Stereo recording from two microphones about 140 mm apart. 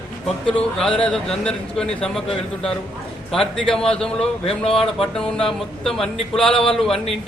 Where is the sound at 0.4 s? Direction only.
5° left (ahead or behind).